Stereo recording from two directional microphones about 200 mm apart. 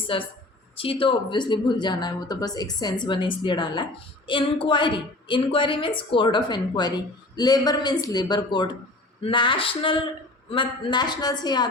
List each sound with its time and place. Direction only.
0.1 s speech: 25° left (ahead or behind)